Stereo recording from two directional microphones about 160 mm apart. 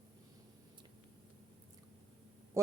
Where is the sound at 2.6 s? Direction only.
20° right (ahead or behind).